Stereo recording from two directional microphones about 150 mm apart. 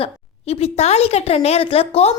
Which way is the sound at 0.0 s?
45° left (ahead or behind).